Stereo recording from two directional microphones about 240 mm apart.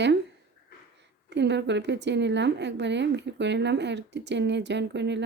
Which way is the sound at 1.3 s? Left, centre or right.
Right.